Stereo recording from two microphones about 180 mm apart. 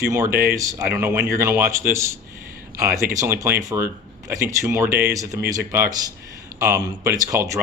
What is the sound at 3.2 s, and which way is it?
Speech, 15° right (ahead or behind).